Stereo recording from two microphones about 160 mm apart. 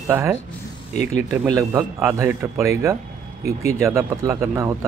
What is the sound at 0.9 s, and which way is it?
Speech, 45° left (ahead or behind).